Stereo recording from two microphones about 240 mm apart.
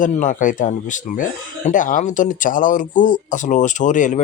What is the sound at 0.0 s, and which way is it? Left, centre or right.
Speech, left.